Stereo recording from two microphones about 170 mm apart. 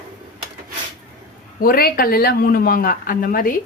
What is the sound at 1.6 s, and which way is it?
A woman's voice, 60° left (ahead or behind).